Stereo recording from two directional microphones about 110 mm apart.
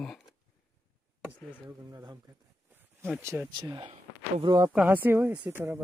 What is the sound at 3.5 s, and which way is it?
Speech, 45° right (ahead or behind).